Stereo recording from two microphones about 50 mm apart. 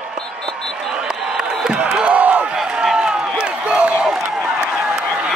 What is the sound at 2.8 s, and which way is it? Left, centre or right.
Run, centre.